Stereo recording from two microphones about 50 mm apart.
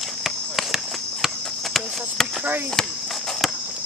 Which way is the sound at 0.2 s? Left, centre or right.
Centre.